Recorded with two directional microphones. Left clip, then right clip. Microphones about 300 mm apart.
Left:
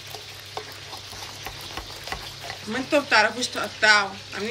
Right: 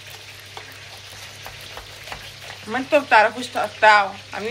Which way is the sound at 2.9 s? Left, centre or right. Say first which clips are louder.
Right 4 dB; centre.